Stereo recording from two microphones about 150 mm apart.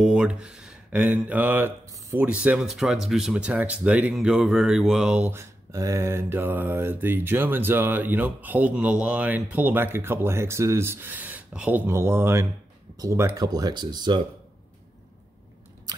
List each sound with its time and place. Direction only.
0.0 s speech: 5° right (ahead or behind); by 14.2 s 30° right (ahead or behind)